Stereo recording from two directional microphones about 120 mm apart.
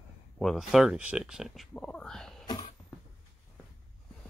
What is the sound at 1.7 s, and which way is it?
Speech, 10° left (ahead or behind).